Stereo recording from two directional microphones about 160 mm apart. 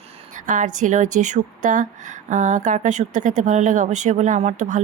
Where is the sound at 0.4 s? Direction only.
55° right (ahead or behind).